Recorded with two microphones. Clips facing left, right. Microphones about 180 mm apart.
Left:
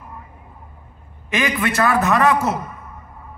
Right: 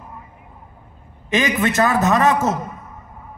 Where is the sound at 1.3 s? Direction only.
25° right (ahead or behind).